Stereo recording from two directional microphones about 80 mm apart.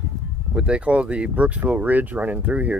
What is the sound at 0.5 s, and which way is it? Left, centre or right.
Speech, centre.